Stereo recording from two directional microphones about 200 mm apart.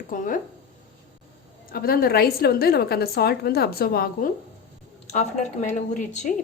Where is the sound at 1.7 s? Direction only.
50° left (ahead or behind).